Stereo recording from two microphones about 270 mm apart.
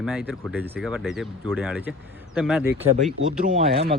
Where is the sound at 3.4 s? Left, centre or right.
Right.